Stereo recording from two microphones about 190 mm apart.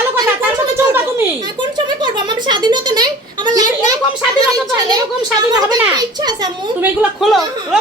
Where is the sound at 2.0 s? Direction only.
25° right (ahead or behind).